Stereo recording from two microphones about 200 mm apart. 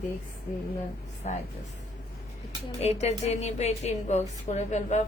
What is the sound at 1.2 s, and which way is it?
Speech, 35° left (ahead or behind).